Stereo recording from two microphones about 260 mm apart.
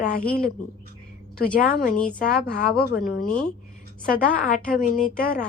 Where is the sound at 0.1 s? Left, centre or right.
Left.